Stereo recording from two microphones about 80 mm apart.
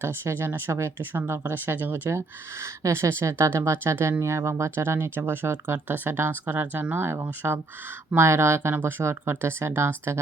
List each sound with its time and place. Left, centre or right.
0.0 s speech: right
2.0 s speech: right